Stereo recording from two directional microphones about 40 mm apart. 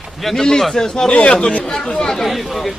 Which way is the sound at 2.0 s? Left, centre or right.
Centre.